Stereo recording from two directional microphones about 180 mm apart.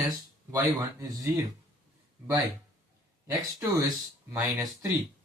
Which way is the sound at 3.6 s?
20° right (ahead or behind).